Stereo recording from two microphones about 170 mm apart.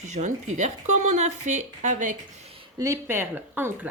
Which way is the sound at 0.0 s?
45° right (ahead or behind).